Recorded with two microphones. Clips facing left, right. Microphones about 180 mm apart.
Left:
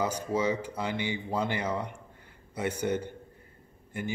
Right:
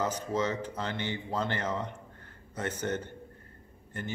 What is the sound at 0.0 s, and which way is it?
A man's voice, 10° left (ahead or behind).